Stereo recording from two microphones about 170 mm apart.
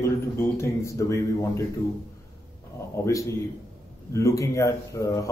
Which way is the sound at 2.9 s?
15° left (ahead or behind).